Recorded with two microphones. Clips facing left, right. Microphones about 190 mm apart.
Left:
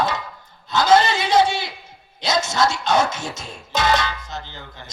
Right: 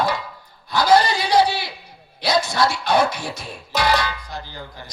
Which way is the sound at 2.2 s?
25° left (ahead or behind).